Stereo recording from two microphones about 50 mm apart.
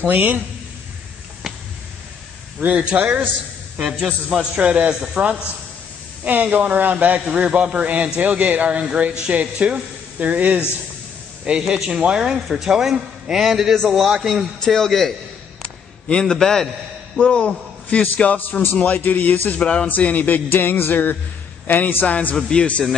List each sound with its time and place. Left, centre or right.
0.0 s speech: right
2.6 s speech: right
3.7 s a man's voice: centre
4.6 s speech: right
11.4 s a man's voice: centre
15.6 s a sound: centre
17.2 s a man's voice: centre; by 19.6 s left
19.6 s a man's voice: left
22.0 s a man's voice: left